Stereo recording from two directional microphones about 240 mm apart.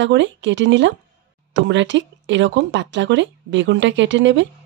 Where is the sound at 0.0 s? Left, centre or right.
Right.